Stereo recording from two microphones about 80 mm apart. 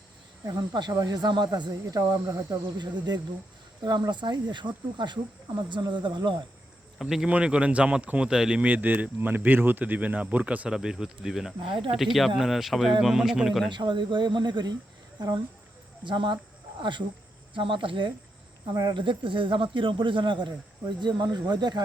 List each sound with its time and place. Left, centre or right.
0.4 s speech: right
0.9 s speech: right
1.3 s speech: right
2.7 s speech: right
7.0 s speech: centre
7.3 s speech: centre
8.7 s speech: right
10.7 s speech: centre
13.7 s speech: right
16.0 s speech: right
17.5 s speech: right
18.7 s speech: right
21.0 s speech: right